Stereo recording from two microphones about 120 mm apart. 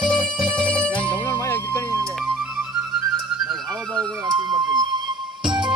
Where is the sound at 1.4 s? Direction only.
20° left (ahead or behind).